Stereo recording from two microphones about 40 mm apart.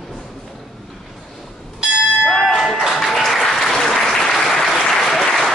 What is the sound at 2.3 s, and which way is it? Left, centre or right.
Applause, centre.